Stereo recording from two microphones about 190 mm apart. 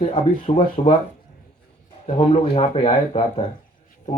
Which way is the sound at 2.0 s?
30° left (ahead or behind).